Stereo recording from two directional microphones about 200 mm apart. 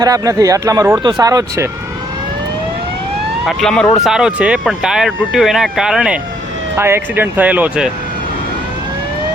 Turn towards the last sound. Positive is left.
turn(degrees=-10)  # may be behind; listen again after turning